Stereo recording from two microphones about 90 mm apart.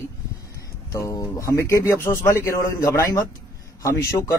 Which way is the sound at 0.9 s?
35° left (ahead or behind).